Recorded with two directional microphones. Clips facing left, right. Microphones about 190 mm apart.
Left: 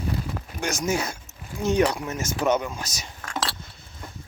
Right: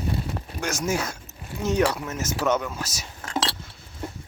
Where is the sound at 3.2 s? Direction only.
25° right (ahead or behind).